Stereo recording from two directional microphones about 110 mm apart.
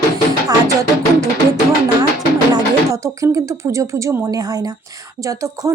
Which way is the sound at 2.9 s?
30° right (ahead or behind).